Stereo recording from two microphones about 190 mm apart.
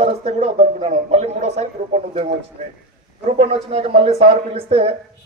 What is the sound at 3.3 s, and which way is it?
A man's voice, 35° right (ahead or behind).